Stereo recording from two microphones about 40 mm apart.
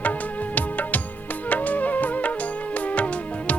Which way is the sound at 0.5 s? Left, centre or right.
Left.